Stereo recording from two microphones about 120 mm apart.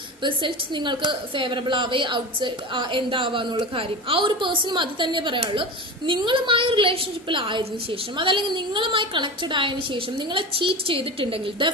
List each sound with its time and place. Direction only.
0.2 s a woman's voice: 40° right (ahead or behind)